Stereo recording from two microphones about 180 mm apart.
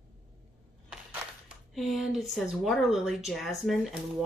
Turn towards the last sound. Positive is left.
turn(degrees=0)  # may be behind; listen again after turning